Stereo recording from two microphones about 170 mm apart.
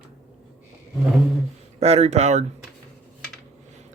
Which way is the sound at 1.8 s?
40° right (ahead or behind).